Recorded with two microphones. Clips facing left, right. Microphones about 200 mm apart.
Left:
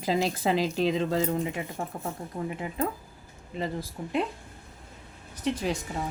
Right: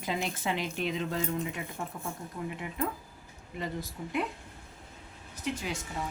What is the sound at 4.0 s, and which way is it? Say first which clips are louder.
Speech: left 3 dB; 45° left (ahead or behind).